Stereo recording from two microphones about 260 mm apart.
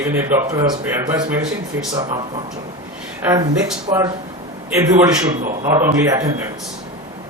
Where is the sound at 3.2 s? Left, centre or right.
Centre.